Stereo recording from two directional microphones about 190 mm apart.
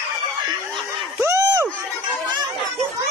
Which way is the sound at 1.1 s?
15° right (ahead or behind).